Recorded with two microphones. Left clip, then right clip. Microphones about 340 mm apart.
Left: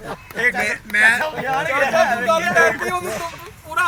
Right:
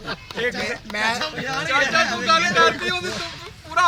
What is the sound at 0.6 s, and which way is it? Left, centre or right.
Speech, centre.